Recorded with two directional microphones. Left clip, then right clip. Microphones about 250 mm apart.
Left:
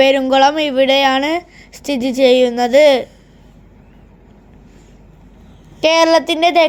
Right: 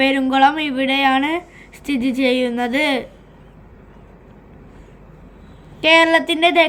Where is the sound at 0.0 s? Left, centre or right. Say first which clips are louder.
Left 4 dB; left.